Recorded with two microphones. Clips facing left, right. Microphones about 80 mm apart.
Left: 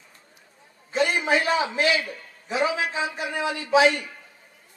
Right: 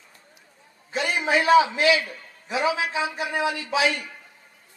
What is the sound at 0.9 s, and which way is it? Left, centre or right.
A man's voice, left.